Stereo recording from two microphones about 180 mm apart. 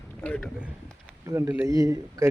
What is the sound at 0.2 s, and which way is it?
Speech, 5° left (ahead or behind).